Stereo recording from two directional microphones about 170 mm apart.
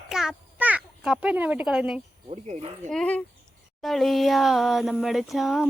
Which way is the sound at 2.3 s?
40° right (ahead or behind).